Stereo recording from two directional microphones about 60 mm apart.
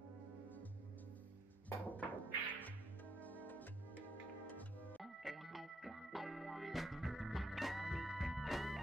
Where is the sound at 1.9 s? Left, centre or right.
Left.